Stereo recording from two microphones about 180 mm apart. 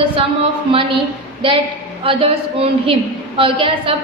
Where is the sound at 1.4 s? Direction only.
30° right (ahead or behind).